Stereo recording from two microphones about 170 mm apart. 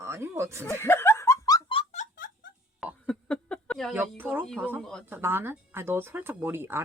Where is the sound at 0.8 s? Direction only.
15° left (ahead or behind); by 2.0 s 30° left (ahead or behind).